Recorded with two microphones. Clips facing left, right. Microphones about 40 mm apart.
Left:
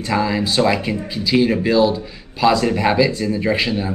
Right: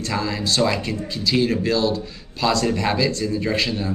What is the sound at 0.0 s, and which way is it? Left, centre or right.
Speech, centre.